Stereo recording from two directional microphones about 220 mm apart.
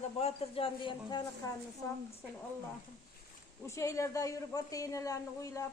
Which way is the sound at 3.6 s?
15° left (ahead or behind).